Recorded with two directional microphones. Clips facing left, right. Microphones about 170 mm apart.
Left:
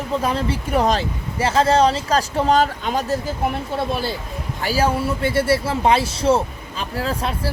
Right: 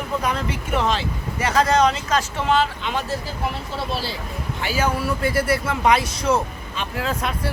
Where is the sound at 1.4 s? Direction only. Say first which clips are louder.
Left 2 dB; 30° left (ahead or behind).